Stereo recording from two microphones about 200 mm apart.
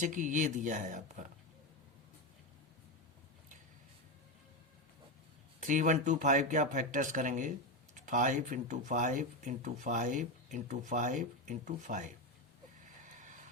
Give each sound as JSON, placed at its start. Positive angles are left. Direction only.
{"t": 0.0, "sound": "speech", "side_deg": -40}
{"t": 5.6, "sound": "speech", "side_deg": -40}